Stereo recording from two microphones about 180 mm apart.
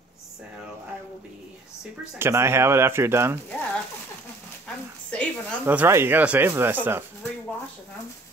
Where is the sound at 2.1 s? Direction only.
15° right (ahead or behind).